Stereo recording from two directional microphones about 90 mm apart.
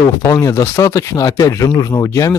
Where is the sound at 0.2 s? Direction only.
40° left (ahead or behind).